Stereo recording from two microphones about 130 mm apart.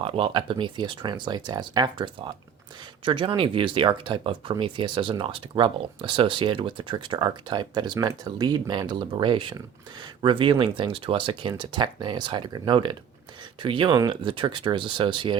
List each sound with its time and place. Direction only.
0.0 s speech: 45° right (ahead or behind)